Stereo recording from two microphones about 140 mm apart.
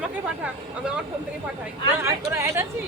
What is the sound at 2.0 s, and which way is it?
Speech, 20° right (ahead or behind).